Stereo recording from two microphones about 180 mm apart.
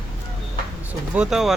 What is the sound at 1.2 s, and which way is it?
Speech, centre (ahead or behind).